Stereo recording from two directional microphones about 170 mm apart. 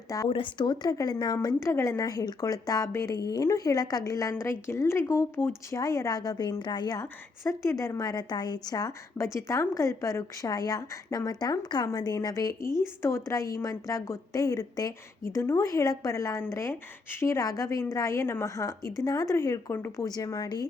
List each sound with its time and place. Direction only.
0.3 s a woman's voice: 30° left (ahead or behind)